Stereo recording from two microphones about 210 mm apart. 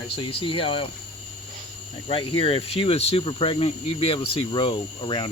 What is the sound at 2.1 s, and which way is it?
Speech, 25° left (ahead or behind).